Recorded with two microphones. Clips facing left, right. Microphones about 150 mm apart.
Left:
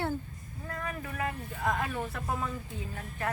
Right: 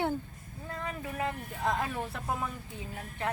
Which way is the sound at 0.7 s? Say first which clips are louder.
Even; 20° right (ahead or behind).